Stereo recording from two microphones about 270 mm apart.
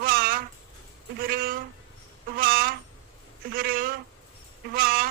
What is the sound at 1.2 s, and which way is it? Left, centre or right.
Speech, right.